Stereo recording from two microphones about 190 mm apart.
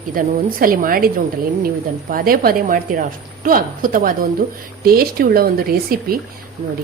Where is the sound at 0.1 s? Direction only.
50° right (ahead or behind).